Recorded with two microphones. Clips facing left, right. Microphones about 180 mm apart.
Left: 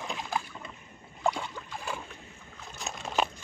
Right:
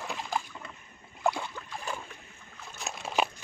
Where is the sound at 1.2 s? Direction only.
10° right (ahead or behind).